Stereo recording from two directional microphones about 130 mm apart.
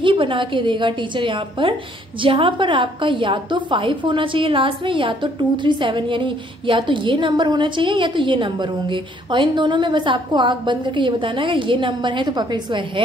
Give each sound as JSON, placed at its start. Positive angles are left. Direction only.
{"t": 0.0, "sound": "a woman's voice", "side_deg": -40}